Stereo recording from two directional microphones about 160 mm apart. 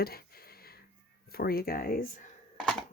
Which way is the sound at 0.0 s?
70° left (ahead or behind).